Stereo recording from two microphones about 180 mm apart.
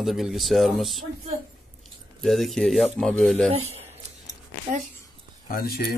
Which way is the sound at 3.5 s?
35° right (ahead or behind).